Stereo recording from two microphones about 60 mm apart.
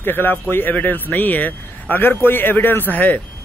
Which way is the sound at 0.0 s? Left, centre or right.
Left.